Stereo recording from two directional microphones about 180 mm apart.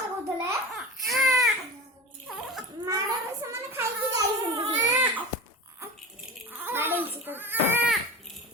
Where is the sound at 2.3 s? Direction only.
5° right (ahead or behind).